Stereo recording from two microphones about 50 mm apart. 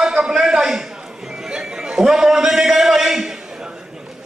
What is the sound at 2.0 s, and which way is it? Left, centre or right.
A man's voice, centre.